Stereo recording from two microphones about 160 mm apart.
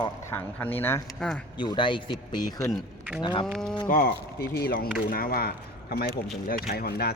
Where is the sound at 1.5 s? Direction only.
30° left (ahead or behind).